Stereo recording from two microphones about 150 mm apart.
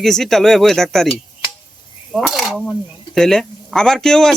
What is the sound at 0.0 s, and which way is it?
Speech, centre (ahead or behind).